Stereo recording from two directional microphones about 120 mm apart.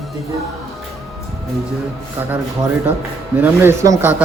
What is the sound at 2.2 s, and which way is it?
Speech, 15° right (ahead or behind).